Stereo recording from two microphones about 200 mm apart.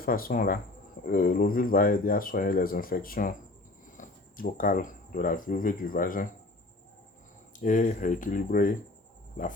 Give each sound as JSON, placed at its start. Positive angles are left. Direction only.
{"t": 0.0, "sound": "speech", "side_deg": 45}
{"t": 7.6, "sound": "speech", "side_deg": 40}